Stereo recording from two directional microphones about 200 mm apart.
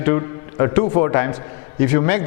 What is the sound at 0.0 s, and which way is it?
Speech, 15° left (ahead or behind).